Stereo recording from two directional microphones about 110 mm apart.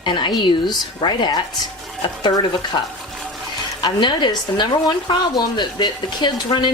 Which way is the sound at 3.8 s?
45° left (ahead or behind).